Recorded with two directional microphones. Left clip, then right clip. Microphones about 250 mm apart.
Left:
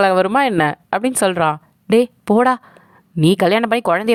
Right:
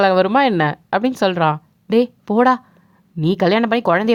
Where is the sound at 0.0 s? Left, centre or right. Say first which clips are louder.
Even; left.